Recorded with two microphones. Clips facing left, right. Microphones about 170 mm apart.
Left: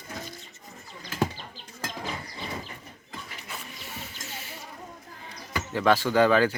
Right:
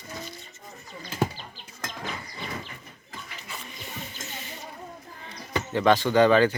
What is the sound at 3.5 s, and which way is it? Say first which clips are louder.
Music: right 2 dB; 5° left (ahead or behind).